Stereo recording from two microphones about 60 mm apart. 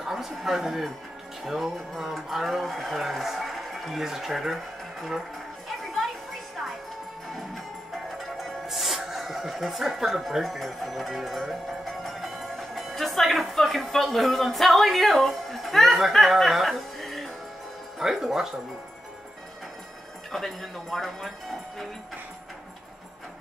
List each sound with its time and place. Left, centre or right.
0.0 s speech: centre
8.2 s speech: centre
20.2 s speech: centre